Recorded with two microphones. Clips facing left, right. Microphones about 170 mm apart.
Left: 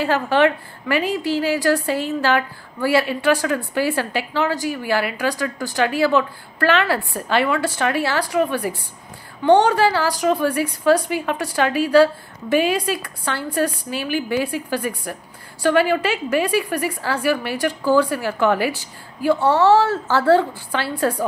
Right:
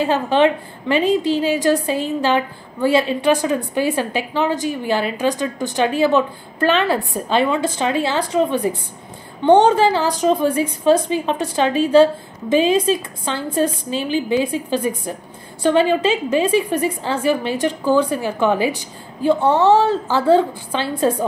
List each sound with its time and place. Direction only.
0.0 s a woman's voice: 20° right (ahead or behind)